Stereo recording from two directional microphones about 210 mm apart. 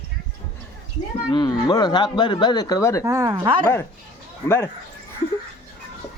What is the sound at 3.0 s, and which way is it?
Speech, 15° right (ahead or behind).